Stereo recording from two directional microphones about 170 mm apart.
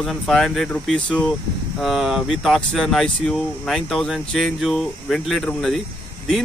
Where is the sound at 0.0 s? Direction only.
Centre (ahead or behind).